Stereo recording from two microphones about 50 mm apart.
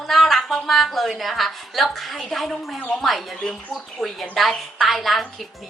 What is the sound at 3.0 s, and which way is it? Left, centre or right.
A woman's voice, centre.